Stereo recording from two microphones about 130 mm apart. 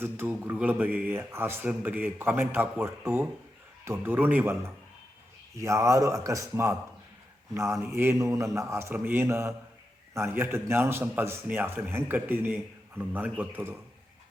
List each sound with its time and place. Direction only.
0.0 s speech: 15° right (ahead or behind)
5.5 s a man's voice: 25° right (ahead or behind)